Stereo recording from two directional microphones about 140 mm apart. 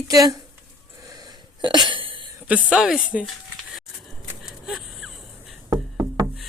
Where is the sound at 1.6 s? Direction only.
35° right (ahead or behind).